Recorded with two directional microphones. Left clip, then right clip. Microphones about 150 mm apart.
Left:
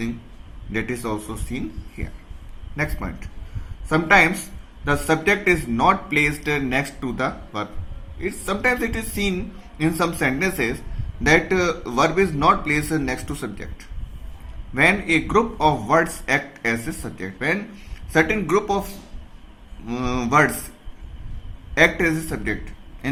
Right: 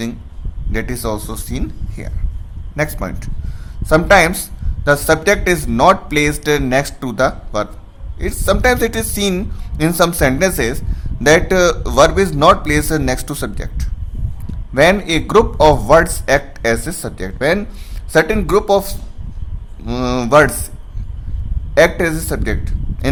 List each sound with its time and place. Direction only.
0.7 s a man's voice: 55° right (ahead or behind)
21.8 s a woman's voice: 55° right (ahead or behind)